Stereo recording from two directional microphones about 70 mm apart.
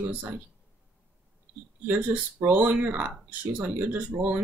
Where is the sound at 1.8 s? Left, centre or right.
Right.